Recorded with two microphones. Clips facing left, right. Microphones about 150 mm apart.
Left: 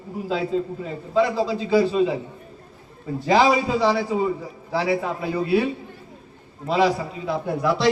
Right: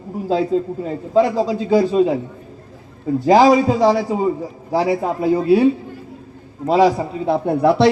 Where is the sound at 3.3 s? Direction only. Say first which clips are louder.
Right 6 dB; 45° right (ahead or behind).